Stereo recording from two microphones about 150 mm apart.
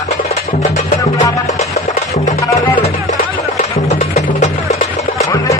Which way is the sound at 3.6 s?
50° left (ahead or behind).